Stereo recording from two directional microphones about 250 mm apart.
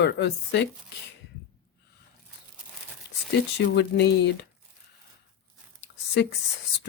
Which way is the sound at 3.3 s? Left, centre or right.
Left.